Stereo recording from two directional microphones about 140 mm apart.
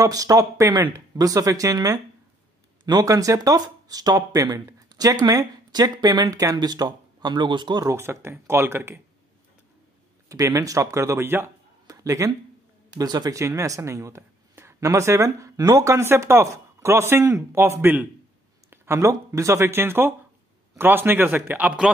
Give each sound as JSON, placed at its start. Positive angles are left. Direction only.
{"t": 0.0, "sound": "speech", "side_deg": -25}
{"t": 7.9, "sound": "speech", "side_deg": -20}
{"t": 10.2, "sound": "speech", "side_deg": -25}